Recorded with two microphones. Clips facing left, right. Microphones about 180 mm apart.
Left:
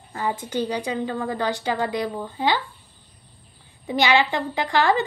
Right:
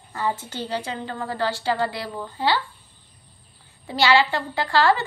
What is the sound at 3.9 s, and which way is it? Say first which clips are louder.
A woman's voice: even; 15° left (ahead or behind).